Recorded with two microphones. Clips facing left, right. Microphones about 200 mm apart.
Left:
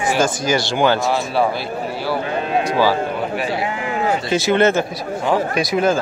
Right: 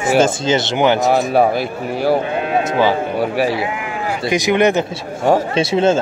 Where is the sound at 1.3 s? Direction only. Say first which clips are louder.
Right 4 dB; 50° right (ahead or behind).